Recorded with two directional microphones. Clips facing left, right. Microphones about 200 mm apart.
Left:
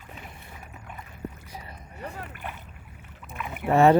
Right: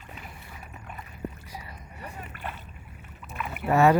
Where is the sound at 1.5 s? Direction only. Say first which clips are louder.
Even; 25° left (ahead or behind).